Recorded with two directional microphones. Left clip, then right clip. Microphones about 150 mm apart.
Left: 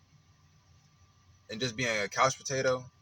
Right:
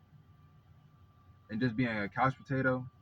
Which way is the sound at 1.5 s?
30° left (ahead or behind).